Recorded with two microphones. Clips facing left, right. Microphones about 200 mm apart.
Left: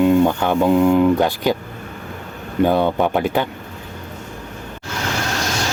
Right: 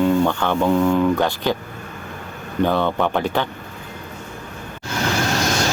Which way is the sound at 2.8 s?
15° left (ahead or behind).